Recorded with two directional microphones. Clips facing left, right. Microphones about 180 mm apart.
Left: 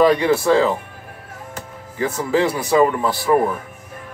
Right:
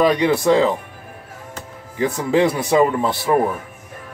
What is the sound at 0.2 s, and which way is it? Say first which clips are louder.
Speech: even; 20° right (ahead or behind).